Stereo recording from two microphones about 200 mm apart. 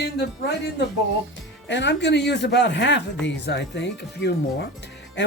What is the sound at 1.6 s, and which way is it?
Speech, 60° left (ahead or behind).